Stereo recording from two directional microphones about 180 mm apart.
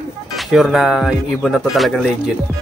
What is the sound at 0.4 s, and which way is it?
Speech, centre (ahead or behind).